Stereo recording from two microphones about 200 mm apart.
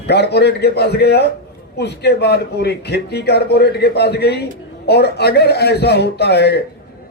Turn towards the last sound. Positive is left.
turn(degrees=55)  # may be behind; listen again after turning